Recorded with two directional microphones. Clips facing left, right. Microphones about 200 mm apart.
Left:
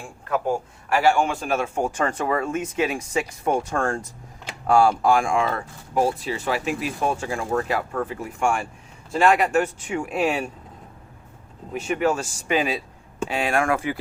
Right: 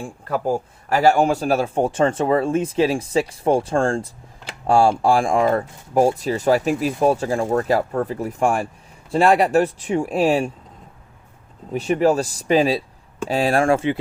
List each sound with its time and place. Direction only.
0.0 s a man's voice: 35° right (ahead or behind)
11.7 s a man's voice: 35° right (ahead or behind)